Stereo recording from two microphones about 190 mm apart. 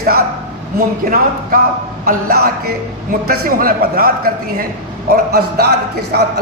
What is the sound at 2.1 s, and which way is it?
A man's voice, 55° right (ahead or behind).